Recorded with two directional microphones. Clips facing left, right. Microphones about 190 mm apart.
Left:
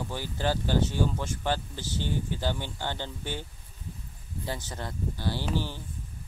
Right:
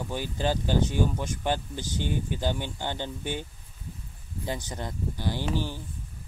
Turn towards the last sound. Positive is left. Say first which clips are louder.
# right 1 dB
turn(degrees=-15)  # may be behind; listen again after turning